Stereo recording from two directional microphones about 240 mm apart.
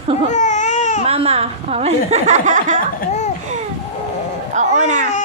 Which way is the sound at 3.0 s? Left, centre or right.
Left.